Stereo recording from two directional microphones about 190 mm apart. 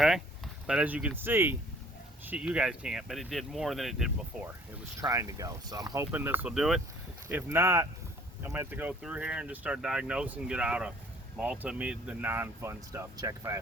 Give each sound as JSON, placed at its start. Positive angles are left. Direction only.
{"t": 0.0, "sound": "speech", "side_deg": 0}
{"t": 4.9, "sound": "speech", "side_deg": -15}